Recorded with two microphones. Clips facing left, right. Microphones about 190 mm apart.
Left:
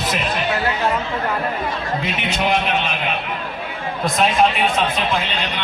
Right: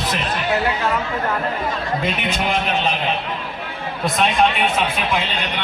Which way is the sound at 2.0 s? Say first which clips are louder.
Left 2 dB; 50° right (ahead or behind).